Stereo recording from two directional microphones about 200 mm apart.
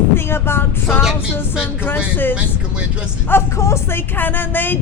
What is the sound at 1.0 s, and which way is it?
Speech, centre (ahead or behind).